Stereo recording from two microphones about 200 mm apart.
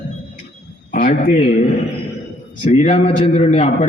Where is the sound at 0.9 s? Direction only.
40° left (ahead or behind).